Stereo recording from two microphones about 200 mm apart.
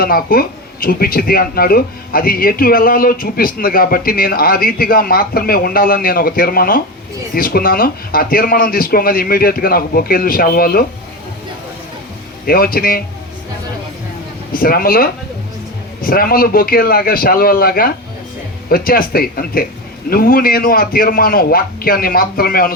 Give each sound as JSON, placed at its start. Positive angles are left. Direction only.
{"t": 0.0, "sound": "speech", "side_deg": 45}
{"t": 12.5, "sound": "speech", "side_deg": 45}
{"t": 14.5, "sound": "speech", "side_deg": 45}